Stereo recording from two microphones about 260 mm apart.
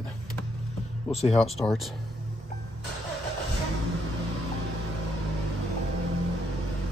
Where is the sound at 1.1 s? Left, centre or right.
Left.